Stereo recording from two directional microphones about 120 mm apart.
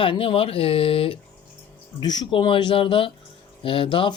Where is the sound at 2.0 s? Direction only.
35° left (ahead or behind).